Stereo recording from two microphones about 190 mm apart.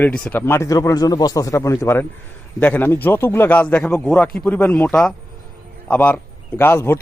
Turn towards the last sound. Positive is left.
turn(degrees=10)  # may be behind; listen again after turning